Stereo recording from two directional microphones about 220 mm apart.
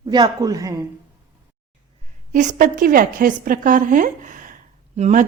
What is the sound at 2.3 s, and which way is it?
Speech, 35° right (ahead or behind).